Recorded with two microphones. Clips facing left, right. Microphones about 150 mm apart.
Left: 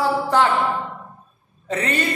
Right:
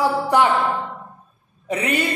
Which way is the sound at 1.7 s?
10° right (ahead or behind).